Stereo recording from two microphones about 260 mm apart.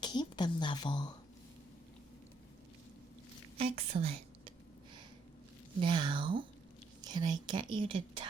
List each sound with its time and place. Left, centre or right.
0.0 s a woman's voice: centre
3.6 s a woman's voice: right
5.8 s speech: centre